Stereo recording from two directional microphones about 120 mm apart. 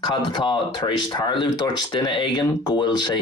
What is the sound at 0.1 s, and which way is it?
Speech, 40° left (ahead or behind).